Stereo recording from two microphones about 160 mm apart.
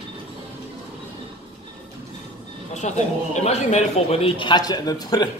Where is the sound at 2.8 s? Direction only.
50° left (ahead or behind); by 5.3 s 25° left (ahead or behind).